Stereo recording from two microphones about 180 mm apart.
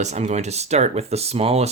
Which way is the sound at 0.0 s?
40° right (ahead or behind).